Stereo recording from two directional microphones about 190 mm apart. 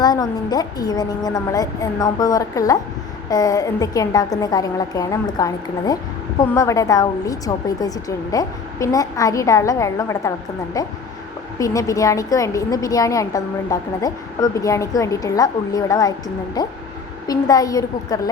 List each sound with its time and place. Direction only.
0.0 s a woman's voice: 20° left (ahead or behind)